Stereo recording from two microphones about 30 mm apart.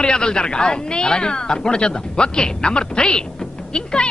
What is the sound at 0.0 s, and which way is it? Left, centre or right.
Speech, left.